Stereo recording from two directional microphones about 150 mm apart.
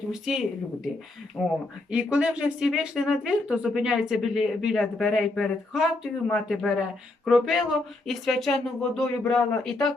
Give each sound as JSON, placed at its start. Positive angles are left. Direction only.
{"t": 0.1, "sound": "speech", "side_deg": -5}
{"t": 1.4, "sound": "speech", "side_deg": 15}
{"t": 1.9, "sound": "speech", "side_deg": -5}